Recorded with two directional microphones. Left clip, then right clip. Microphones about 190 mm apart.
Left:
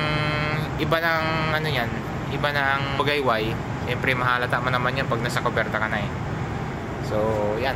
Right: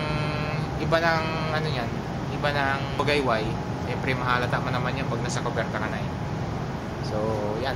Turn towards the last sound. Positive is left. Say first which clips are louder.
# left 5 dB
turn(degrees=25)  # may be behind; listen again after turning